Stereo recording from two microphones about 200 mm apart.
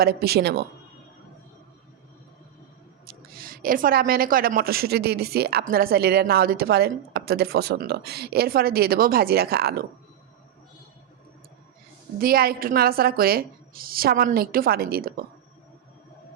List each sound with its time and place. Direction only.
0.0 s a woman's voice: 50° right (ahead or behind)
3.1 s a woman's voice: 45° right (ahead or behind)
12.2 s a woman's voice: 50° right (ahead or behind)